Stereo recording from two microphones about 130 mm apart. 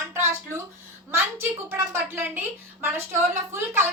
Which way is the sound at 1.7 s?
15° right (ahead or behind).